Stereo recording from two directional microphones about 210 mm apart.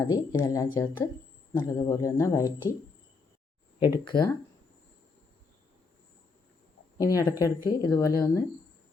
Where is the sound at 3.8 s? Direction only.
20° left (ahead or behind).